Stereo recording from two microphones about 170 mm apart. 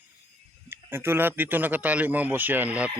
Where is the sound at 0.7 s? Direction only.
15° right (ahead or behind).